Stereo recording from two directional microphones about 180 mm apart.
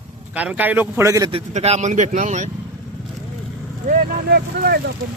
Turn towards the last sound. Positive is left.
turn(degrees=-60)  # may be behind; listen again after turning